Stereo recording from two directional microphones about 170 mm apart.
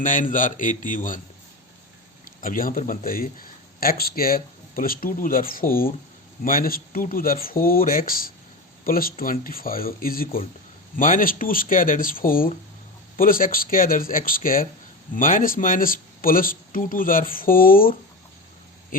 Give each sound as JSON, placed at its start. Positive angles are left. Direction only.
{"t": 0.0, "sound": "a man's voice", "side_deg": 50}
{"t": 2.2, "sound": "speech", "side_deg": 55}